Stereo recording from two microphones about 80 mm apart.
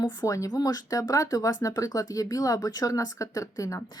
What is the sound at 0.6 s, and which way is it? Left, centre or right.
Speech, left.